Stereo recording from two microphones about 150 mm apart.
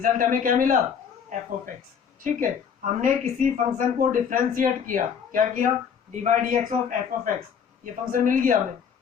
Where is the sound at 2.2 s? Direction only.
60° right (ahead or behind).